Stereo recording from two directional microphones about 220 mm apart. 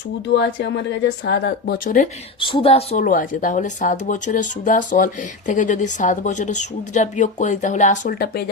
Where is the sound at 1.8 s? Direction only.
35° left (ahead or behind).